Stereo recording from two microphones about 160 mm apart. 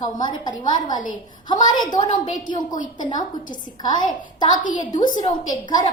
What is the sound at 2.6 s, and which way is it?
Speech, 55° left (ahead or behind).